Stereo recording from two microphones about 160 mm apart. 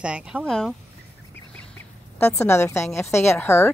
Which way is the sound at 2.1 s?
5° left (ahead or behind).